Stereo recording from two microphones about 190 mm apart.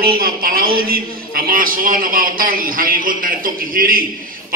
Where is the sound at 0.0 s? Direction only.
50° right (ahead or behind).